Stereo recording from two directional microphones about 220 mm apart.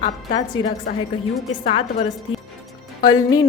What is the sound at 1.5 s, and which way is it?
Speech, 30° left (ahead or behind).